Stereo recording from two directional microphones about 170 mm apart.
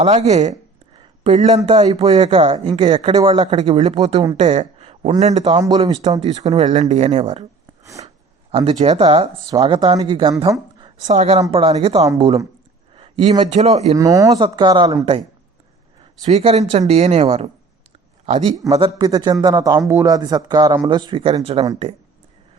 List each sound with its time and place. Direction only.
0.0 s a man's voice: 40° right (ahead or behind)
5.5 s speech: 25° right (ahead or behind)
5.8 s a man's voice: 40° right (ahead or behind)
8.0 s a sound: 35° right (ahead or behind)
8.5 s a man's voice: 35° right (ahead or behind)
10.4 s a sound: 25° right (ahead or behind)
11.0 s a woman's voice: 45° right (ahead or behind)
13.4 s a man's voice: 40° right (ahead or behind)
13.9 s speech: 20° right (ahead or behind)
16.2 s a man's voice: 40° right (ahead or behind)
18.7 s a man's voice: 30° right (ahead or behind)